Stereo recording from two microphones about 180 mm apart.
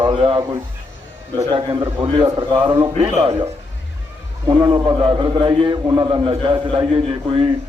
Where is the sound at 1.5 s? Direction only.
25° right (ahead or behind).